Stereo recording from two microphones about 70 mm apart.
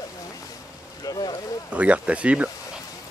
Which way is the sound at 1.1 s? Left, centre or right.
Left.